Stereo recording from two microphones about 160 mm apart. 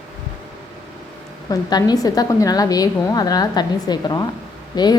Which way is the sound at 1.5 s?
25° left (ahead or behind).